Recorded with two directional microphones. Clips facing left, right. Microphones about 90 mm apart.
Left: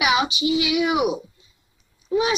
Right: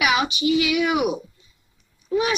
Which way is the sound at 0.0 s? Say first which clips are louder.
Even; 25° left (ahead or behind).